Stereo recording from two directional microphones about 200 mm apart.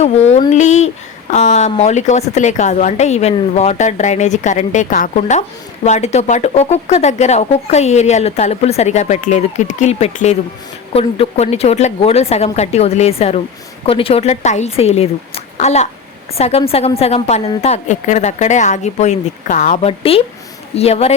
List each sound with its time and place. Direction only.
0.0 s a woman's voice: 35° left (ahead or behind)